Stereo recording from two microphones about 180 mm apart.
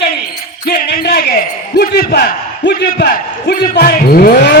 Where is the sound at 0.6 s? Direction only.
70° left (ahead or behind).